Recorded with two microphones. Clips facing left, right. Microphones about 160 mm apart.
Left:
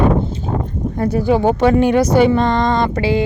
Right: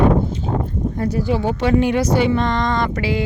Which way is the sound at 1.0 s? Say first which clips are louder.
Left 6 dB; 55° left (ahead or behind).